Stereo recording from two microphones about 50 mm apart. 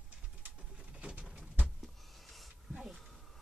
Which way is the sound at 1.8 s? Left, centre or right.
Centre.